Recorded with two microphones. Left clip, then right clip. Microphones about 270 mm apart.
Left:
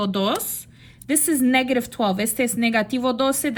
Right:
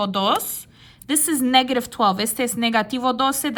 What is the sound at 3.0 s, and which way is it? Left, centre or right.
Speech, right.